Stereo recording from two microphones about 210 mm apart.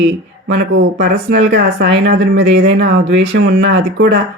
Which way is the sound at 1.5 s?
50° right (ahead or behind).